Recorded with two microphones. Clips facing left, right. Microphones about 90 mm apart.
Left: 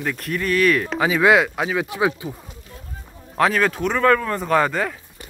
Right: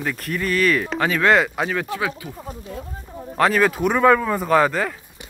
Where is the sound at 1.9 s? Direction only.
25° left (ahead or behind).